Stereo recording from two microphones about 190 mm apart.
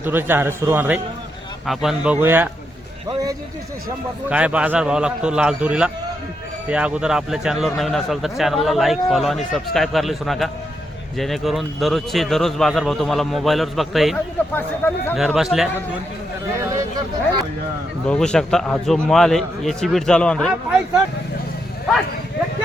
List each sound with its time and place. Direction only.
0.0 s a man's voice: 10° right (ahead or behind)
4.3 s speech: 5° right (ahead or behind)
14.5 s speech: 10° left (ahead or behind)
15.1 s speech: centre (ahead or behind)
18.1 s speech: 5° left (ahead or behind)